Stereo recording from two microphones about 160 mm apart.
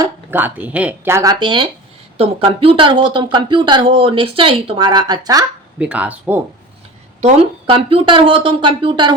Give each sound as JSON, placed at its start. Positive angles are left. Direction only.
{"t": 0.0, "sound": "speech", "side_deg": -10}
{"t": 5.8, "sound": "speech", "side_deg": -10}
{"t": 7.2, "sound": "a woman's voice", "side_deg": -45}